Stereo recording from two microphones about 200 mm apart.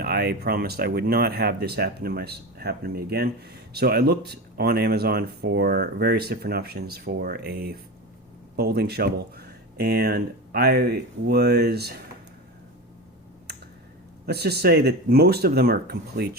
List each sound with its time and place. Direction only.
0.0 s speech: 55° right (ahead or behind)
14.3 s speech: 55° right (ahead or behind)